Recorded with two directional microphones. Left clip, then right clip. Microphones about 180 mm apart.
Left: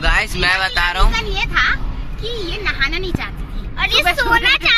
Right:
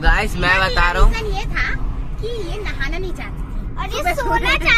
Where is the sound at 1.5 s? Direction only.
20° left (ahead or behind).